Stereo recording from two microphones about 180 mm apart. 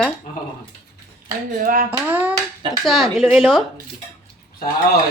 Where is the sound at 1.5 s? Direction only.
50° right (ahead or behind).